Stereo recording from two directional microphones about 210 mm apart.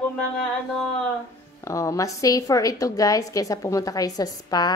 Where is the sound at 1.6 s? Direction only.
15° left (ahead or behind).